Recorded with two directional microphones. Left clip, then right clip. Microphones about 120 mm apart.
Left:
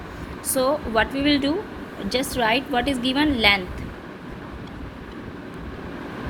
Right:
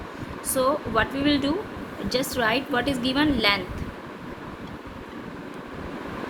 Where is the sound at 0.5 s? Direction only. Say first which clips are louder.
Left 2 dB; 20° left (ahead or behind).